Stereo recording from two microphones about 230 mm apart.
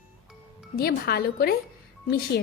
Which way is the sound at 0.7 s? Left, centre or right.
Left.